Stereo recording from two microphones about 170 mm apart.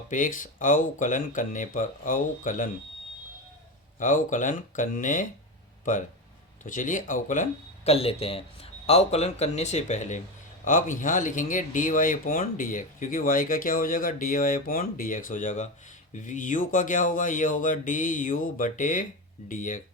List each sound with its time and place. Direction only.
0.1 s speech: 50° left (ahead or behind)
4.0 s speech: 50° left (ahead or behind)
7.9 s speech: 35° left (ahead or behind); by 19.8 s 50° left (ahead or behind)